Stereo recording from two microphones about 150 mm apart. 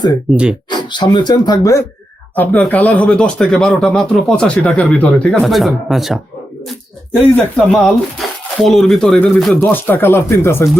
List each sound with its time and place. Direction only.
0.3 s speech: centre (ahead or behind)
0.7 s speech: 30° left (ahead or behind)
2.3 s speech: 10° left (ahead or behind)
7.7 s speech: centre (ahead or behind)
9.6 s speech: 15° left (ahead or behind)